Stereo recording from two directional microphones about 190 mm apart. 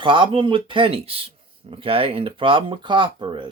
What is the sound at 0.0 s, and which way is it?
Speech, 25° right (ahead or behind).